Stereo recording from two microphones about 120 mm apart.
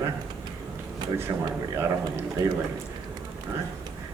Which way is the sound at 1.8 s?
25° right (ahead or behind).